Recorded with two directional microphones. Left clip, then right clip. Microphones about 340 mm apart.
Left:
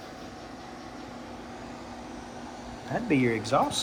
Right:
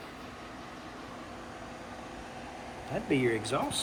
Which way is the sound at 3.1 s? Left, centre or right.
Left.